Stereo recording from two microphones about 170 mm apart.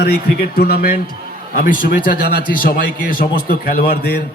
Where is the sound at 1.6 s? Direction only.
55° left (ahead or behind).